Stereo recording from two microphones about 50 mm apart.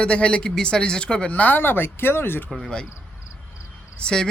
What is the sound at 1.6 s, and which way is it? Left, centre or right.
Speech, left.